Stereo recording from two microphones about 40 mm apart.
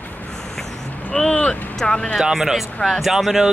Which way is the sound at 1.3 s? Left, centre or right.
Left.